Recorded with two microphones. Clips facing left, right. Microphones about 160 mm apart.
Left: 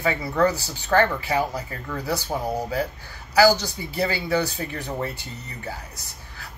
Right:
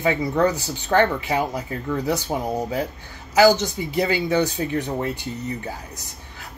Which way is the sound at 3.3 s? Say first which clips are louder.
Right 2 dB; 20° right (ahead or behind).